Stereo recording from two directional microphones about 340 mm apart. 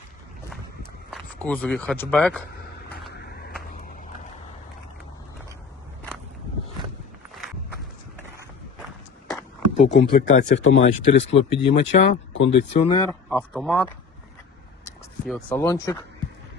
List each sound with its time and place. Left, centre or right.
1.1 s speech: centre
2.5 s vehicle: left
3.1 s a sound: left
9.3 s a sound: centre
9.9 s speech: left
12.5 s speech: centre
15.3 s speech: centre